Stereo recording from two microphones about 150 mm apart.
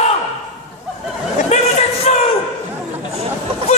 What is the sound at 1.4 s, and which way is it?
Speech, 45° left (ahead or behind).